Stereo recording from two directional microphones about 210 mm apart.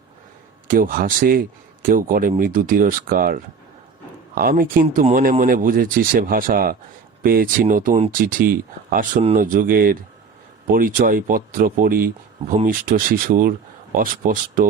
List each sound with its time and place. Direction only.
0.7 s speech: 40° right (ahead or behind)